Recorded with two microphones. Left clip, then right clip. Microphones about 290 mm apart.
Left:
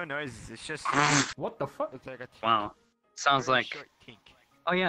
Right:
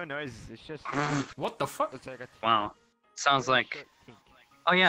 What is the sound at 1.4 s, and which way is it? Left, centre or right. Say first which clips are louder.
Speech: right 2 dB; right.